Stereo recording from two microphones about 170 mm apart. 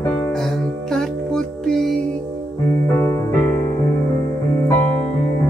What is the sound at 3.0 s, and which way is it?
Music, 15° left (ahead or behind).